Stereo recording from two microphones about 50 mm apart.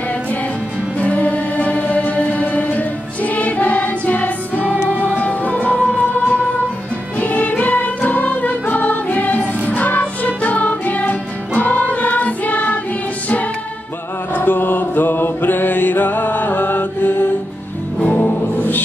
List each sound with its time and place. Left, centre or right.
0.9 s music: left
14.3 s mantra: left
18.0 s music: left